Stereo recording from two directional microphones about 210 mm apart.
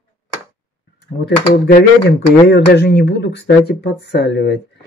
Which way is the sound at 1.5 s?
50° left (ahead or behind).